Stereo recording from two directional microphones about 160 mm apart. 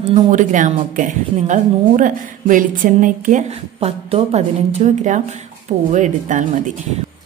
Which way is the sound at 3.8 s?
40° right (ahead or behind).